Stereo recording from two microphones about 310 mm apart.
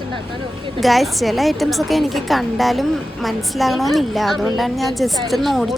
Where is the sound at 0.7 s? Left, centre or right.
Centre.